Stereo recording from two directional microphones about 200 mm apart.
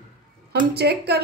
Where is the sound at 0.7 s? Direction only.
55° right (ahead or behind).